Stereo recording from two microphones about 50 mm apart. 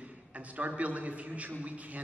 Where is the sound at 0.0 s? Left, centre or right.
Right.